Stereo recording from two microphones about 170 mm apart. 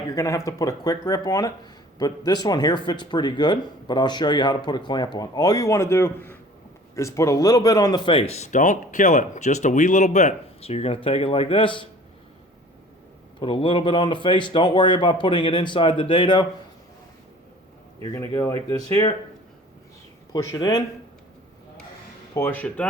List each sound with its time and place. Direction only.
0.2 s speech: 15° left (ahead or behind)
13.4 s speech: 30° left (ahead or behind)
18.0 s speech: 15° left (ahead or behind)
20.3 s speech: 20° left (ahead or behind)
22.4 s speech: 10° left (ahead or behind)